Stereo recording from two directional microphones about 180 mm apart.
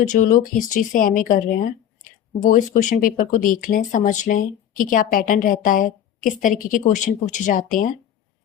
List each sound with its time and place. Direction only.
0.1 s speech: 45° left (ahead or behind)
2.4 s speech: 45° left (ahead or behind)